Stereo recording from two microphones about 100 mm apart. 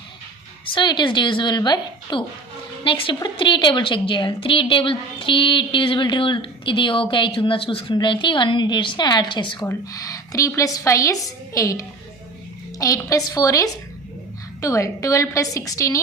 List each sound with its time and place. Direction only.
0.6 s a woman's voice: 55° left (ahead or behind)
9.9 s a woman's voice: 35° left (ahead or behind)